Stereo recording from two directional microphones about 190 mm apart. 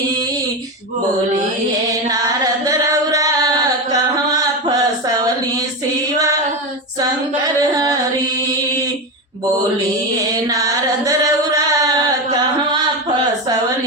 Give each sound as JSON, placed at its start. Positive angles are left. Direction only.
{"t": 1.9, "sound": "singing", "side_deg": -20}
{"t": 4.3, "sound": "a sound", "side_deg": -20}
{"t": 7.0, "sound": "singing", "side_deg": -20}
{"t": 10.4, "sound": "singing", "side_deg": -15}